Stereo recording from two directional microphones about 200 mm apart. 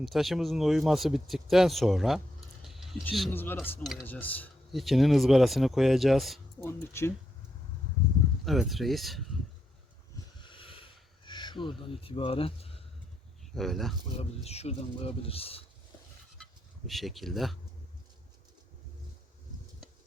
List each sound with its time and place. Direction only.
0.0 s speech: centre (ahead or behind)
2.6 s a sound: centre (ahead or behind)
3.0 s speech: 10° left (ahead or behind)
6.6 s speech: 10° left (ahead or behind)
8.4 s speech: centre (ahead or behind)
10.4 s a sound: 25° left (ahead or behind)
11.3 s speech: 25° left (ahead or behind)
13.5 s speech: centre (ahead or behind)
14.2 s speech: 30° left (ahead or behind)
16.4 s speech: centre (ahead or behind)